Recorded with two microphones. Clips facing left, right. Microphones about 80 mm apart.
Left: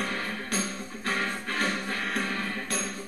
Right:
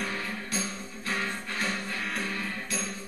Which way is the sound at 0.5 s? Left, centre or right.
Left.